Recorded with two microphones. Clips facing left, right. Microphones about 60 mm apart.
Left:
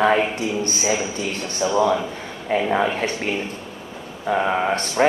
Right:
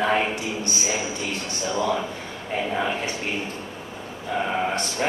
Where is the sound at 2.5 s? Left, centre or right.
Left.